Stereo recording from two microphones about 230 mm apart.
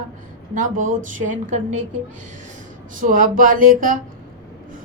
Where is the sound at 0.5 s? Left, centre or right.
Right.